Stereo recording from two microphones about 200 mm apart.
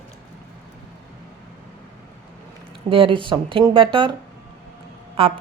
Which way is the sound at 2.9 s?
25° right (ahead or behind).